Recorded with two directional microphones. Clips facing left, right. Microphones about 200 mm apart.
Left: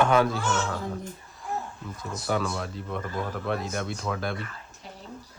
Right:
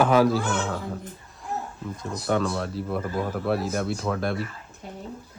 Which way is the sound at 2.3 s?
Centre (ahead or behind).